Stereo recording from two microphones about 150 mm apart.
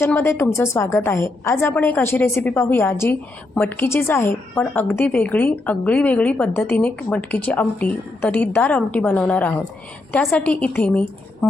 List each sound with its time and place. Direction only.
0.0 s a woman's voice: 15° left (ahead or behind)